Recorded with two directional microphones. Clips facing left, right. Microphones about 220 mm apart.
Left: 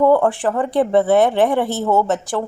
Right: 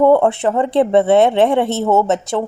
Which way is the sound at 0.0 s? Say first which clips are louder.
Right 2 dB; 25° right (ahead or behind).